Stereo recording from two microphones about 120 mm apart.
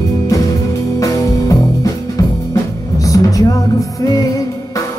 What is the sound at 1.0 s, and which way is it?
Music, 30° left (ahead or behind).